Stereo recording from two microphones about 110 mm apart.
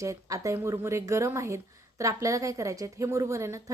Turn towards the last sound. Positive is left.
turn(degrees=-25)  # may be behind; listen again after turning